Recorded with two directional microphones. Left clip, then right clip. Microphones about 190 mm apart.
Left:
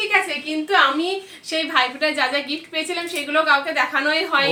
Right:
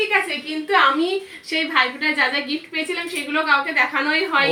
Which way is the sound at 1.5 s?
25° left (ahead or behind).